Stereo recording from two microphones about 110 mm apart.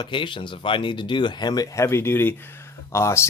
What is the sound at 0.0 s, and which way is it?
Speech, 50° left (ahead or behind).